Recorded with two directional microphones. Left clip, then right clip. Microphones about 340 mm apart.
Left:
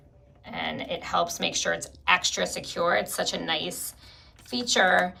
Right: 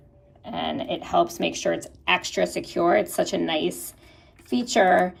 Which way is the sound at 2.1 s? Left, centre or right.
Left.